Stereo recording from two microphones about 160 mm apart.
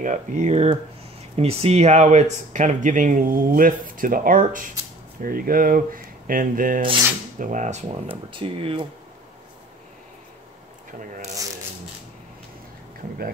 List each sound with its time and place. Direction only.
0.0 s speech: 50° right (ahead or behind)
8.3 s speech: 35° right (ahead or behind)
10.9 s speech: 55° right (ahead or behind)